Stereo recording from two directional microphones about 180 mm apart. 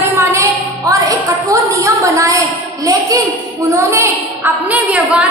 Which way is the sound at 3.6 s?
15° right (ahead or behind).